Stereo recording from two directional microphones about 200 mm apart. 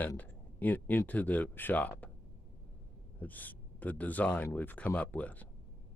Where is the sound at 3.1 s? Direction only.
10° left (ahead or behind).